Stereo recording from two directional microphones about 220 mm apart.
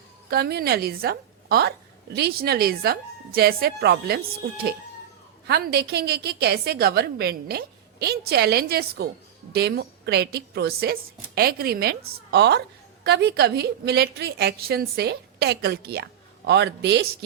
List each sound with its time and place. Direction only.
0.3 s a woman's voice: 45° right (ahead or behind)
5.5 s a woman's voice: 45° right (ahead or behind)